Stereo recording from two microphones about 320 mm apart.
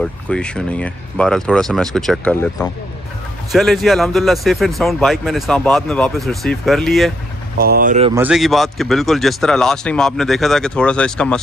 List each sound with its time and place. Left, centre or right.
0.0 s speech: centre
7.5 s speech: right
8.1 s speech: centre